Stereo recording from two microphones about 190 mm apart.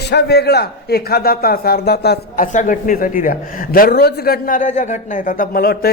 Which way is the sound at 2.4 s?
40° left (ahead or behind).